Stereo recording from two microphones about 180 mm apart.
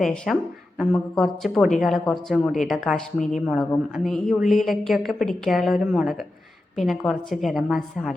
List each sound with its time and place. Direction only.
0.0 s a woman's voice: centre (ahead or behind)